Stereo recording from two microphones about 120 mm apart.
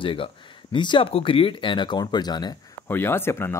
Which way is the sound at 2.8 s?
20° left (ahead or behind).